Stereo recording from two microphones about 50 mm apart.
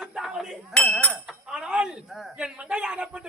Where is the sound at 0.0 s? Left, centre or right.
Centre.